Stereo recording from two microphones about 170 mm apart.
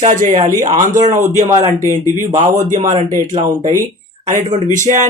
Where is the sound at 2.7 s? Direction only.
50° right (ahead or behind).